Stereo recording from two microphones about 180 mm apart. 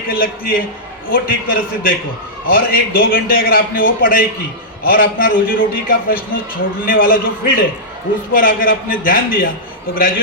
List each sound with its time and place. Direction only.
0.1 s a man's voice: 55° left (ahead or behind)